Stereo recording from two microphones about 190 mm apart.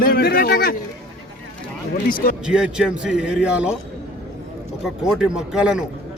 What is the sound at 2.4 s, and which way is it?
Speech, 5° right (ahead or behind).